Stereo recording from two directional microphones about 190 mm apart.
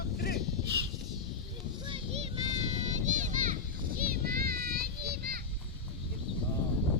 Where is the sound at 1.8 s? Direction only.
30° right (ahead or behind); by 5.4 s 55° right (ahead or behind).